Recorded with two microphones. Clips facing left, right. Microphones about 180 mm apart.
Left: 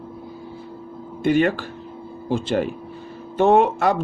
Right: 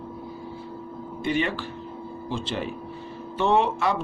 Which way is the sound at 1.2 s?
50° left (ahead or behind).